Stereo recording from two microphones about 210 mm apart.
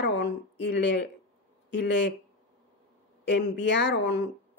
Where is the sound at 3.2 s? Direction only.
55° left (ahead or behind).